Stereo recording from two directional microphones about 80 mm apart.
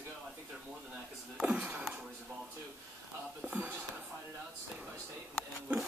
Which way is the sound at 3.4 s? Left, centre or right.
Right.